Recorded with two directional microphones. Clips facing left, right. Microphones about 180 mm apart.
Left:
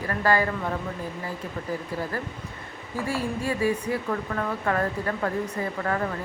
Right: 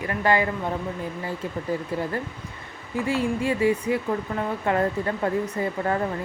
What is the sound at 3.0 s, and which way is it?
Speech, 20° right (ahead or behind).